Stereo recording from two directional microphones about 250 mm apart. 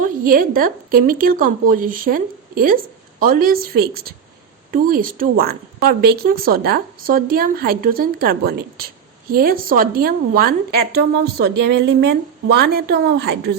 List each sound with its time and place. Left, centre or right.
0.0 s speech: right